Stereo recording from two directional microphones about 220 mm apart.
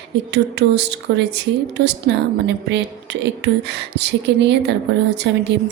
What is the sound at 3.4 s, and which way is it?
Speech, 50° right (ahead or behind).